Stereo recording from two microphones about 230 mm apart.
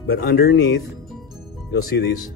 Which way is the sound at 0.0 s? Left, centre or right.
Left.